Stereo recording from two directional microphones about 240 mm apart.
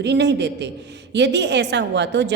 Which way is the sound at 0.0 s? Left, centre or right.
Right.